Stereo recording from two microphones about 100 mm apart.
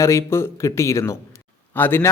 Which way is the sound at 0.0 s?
30° left (ahead or behind).